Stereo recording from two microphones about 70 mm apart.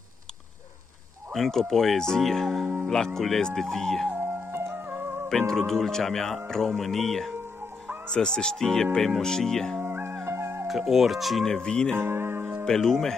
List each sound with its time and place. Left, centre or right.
1.3 s speech: centre
4.2 s music: right
5.5 s speech: centre
9.8 s music: right
10.7 s speech: centre
12.0 s music: right
12.6 s speech: centre